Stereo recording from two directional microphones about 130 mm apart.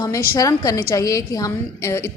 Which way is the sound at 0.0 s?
25° left (ahead or behind).